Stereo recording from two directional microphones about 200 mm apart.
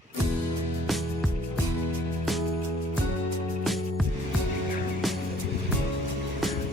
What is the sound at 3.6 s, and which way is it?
Music, centre (ahead or behind).